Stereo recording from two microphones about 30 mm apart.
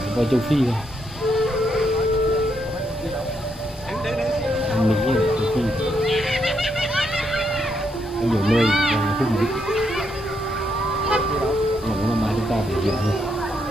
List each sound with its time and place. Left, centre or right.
0.2 s speech: centre
1.7 s a sound: centre
4.5 s music: centre
8.3 s speech: centre
9.0 s speech: centre
11.1 s honk: right
12.1 s music: centre